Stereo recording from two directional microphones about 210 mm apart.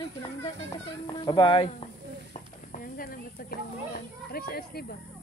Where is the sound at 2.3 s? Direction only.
40° left (ahead or behind).